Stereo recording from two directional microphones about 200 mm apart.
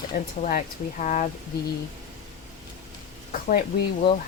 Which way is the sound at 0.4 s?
40° left (ahead or behind).